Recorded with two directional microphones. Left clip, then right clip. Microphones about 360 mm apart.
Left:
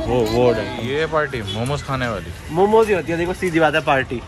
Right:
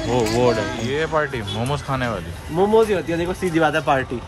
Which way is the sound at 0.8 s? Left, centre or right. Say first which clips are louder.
Left 2 dB; centre.